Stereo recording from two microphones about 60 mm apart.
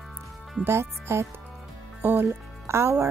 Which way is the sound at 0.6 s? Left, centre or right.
Right.